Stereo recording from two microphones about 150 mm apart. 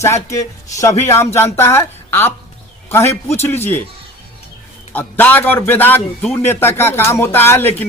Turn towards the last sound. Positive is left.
turn(degrees=15)  # may be behind; listen again after turning